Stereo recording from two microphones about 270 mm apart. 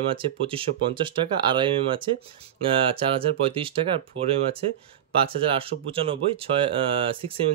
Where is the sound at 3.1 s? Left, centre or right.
Centre.